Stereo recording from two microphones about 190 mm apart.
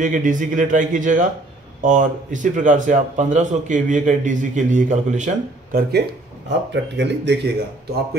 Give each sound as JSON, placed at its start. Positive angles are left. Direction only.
{"t": 0.0, "sound": "a man's voice", "side_deg": -45}